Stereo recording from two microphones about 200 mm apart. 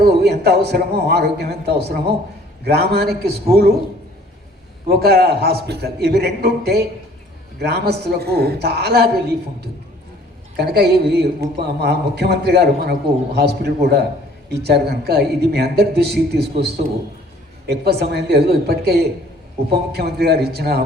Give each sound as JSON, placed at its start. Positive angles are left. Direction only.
{"t": 0.2, "sound": "a man's voice", "side_deg": -55}
{"t": 4.9, "sound": "a man's voice", "side_deg": -50}
{"t": 10.6, "sound": "a man's voice", "side_deg": -55}